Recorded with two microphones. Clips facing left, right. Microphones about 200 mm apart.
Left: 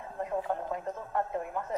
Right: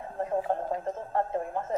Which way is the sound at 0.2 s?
30° right (ahead or behind).